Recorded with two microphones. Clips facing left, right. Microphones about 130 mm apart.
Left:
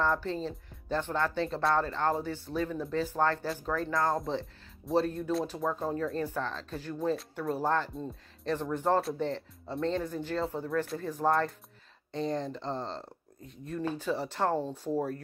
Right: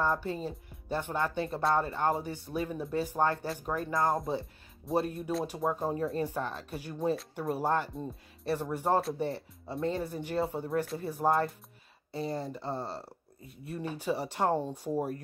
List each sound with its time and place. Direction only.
0.0 s speech: 15° right (ahead or behind)